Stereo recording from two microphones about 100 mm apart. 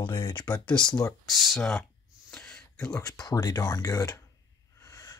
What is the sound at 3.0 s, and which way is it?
Speech, 40° left (ahead or behind).